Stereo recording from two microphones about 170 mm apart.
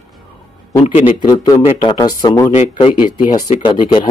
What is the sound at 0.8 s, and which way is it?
Speech, 40° left (ahead or behind).